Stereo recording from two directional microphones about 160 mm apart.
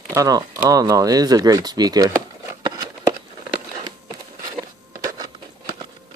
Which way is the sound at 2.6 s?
25° right (ahead or behind).